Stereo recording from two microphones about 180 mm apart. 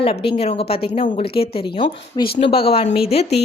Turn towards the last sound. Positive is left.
turn(degrees=35)  # may be behind; listen again after turning